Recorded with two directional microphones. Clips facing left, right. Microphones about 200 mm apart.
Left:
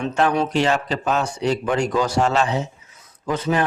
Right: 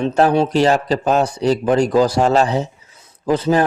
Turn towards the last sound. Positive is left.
turn(degrees=-35)  # may be behind; listen again after turning